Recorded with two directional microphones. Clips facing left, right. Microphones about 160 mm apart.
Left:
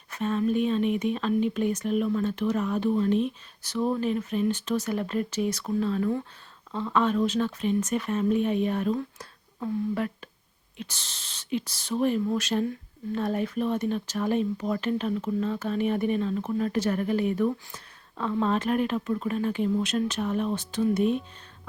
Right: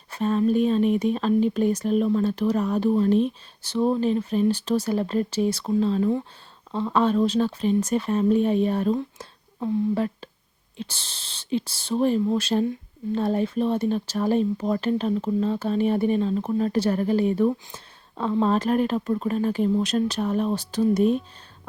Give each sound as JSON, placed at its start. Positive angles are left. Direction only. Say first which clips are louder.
{"t": 0.1, "sound": "speech", "louder": "right 4 dB", "side_deg": -35}
{"t": 6.7, "sound": "speech", "louder": "right 3 dB", "side_deg": -30}